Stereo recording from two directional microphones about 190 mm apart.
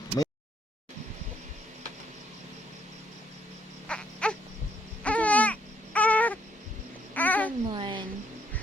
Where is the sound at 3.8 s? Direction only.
5° left (ahead or behind).